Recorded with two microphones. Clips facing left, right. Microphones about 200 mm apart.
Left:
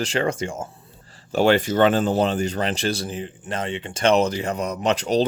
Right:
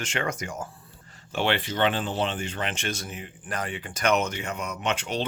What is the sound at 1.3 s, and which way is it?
Speech, 40° left (ahead or behind).